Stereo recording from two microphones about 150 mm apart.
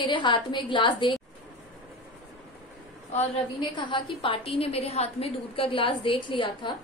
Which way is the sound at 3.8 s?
35° left (ahead or behind).